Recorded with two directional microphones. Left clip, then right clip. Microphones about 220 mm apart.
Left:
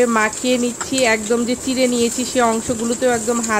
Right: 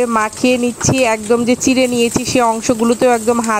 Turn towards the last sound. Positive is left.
turn(degrees=-40)  # may be behind; listen again after turning